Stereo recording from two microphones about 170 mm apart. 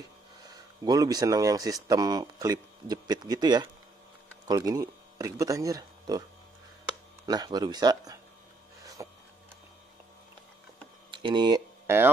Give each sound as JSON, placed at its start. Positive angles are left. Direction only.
{"t": 0.6, "sound": "speech", "side_deg": -20}
{"t": 7.2, "sound": "speech", "side_deg": -25}
{"t": 9.0, "sound": "a sound", "side_deg": -20}
{"t": 11.1, "sound": "speech", "side_deg": -30}